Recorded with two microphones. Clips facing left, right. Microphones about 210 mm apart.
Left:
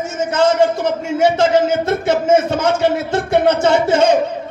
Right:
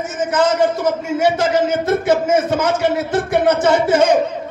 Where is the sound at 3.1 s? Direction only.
25° left (ahead or behind).